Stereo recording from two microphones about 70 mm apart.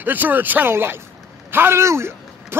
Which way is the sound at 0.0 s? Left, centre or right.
Right.